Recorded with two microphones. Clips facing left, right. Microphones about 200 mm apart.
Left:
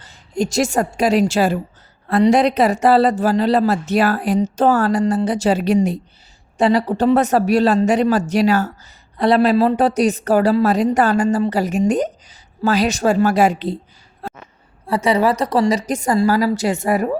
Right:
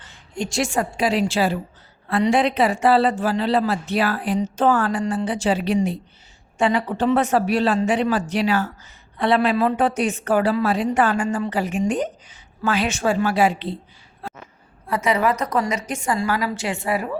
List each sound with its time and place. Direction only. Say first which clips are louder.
0.0 s a woman's voice: left 7 dB; 40° left (ahead or behind)
14.2 s a sound: left 4 dB; 40° left (ahead or behind)
14.8 s speech: left 4 dB; 30° left (ahead or behind)